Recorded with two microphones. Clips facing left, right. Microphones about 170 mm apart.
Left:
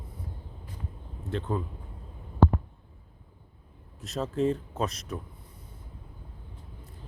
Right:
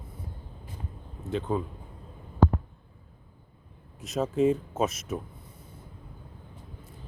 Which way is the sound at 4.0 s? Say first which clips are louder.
Right 3 dB; centre (ahead or behind).